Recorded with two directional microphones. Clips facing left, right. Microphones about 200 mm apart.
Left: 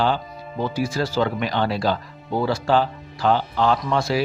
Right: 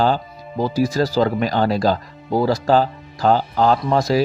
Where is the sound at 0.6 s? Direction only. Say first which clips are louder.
Right 5 dB; 40° right (ahead or behind).